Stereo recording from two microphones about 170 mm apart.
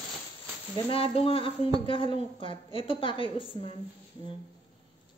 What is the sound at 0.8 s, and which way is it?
A woman's voice, 35° left (ahead or behind).